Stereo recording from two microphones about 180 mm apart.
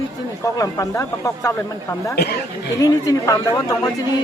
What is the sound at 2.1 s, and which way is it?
Speech, 65° left (ahead or behind).